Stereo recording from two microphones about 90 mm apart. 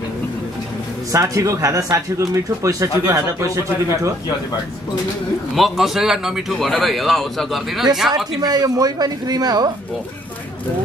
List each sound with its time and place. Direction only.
1.1 s speech: 35° right (ahead or behind)
5.5 s a man's voice: centre (ahead or behind)
8.4 s speech: 50° right (ahead or behind)